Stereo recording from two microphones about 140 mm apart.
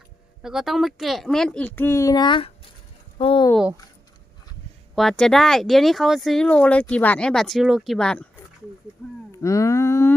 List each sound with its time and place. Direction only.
0.4 s speech: centre (ahead or behind); by 3.4 s 40° left (ahead or behind)
4.9 s speech: 5° left (ahead or behind)
9.3 s a sound: 20° left (ahead or behind)